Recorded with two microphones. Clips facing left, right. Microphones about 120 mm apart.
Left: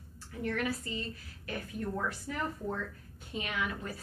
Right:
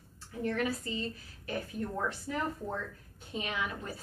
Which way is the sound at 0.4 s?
25° right (ahead or behind).